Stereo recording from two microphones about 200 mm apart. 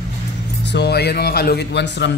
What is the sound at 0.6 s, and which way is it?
Speech, 60° left (ahead or behind).